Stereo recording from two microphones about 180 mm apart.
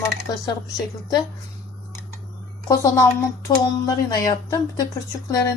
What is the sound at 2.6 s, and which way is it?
Speech, 20° left (ahead or behind).